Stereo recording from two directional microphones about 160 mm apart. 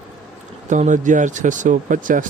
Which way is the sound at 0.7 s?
50° right (ahead or behind).